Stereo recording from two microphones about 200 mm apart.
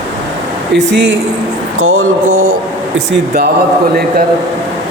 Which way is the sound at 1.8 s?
90° right.